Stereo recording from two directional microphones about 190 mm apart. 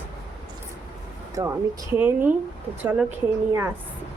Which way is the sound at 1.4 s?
20° right (ahead or behind).